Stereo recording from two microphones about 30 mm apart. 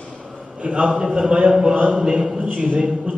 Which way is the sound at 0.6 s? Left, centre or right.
Right.